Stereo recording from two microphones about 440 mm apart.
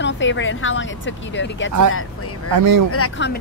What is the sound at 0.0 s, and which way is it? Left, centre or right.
Speech, left.